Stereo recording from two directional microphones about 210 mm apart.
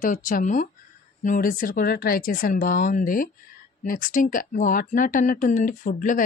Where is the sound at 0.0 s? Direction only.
40° left (ahead or behind).